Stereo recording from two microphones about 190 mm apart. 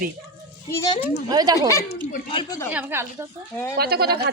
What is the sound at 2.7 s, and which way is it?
Speech, 10° right (ahead or behind).